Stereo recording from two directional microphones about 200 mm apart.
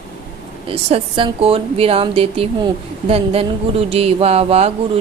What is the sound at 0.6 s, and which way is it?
A woman's voice, 30° right (ahead or behind).